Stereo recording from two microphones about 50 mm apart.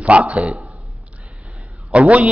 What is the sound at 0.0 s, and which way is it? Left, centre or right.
Speech, right.